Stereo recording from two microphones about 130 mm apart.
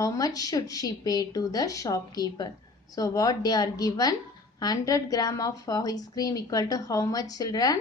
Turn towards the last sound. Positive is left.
turn(degrees=30)  # may be behind; listen again after turning